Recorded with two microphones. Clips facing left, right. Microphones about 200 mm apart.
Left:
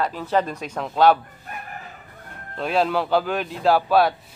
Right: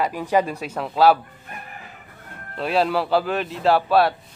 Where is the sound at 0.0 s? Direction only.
10° right (ahead or behind).